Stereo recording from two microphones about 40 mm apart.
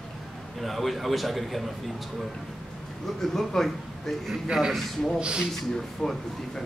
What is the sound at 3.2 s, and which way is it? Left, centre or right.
Speech, centre.